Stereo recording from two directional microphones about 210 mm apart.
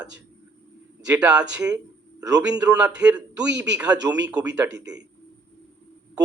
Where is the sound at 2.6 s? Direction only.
5° right (ahead or behind).